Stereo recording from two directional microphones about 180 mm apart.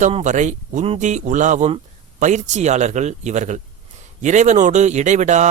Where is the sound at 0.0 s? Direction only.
40° right (ahead or behind).